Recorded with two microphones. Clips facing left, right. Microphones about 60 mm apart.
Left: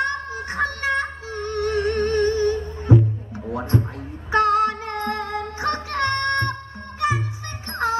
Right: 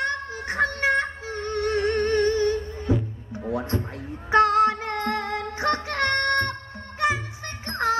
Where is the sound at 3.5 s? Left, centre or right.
Left.